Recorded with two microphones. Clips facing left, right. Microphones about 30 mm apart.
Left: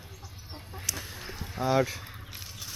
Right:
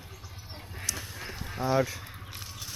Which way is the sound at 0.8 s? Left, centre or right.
Centre.